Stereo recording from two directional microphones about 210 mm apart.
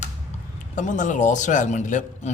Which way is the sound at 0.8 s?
35° left (ahead or behind).